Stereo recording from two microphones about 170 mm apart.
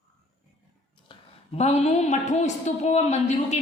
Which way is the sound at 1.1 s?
40° left (ahead or behind).